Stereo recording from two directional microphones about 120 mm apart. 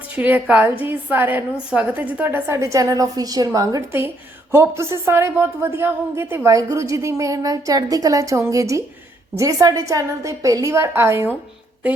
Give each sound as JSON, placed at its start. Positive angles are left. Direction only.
{"t": 0.2, "sound": "a woman's voice", "side_deg": -15}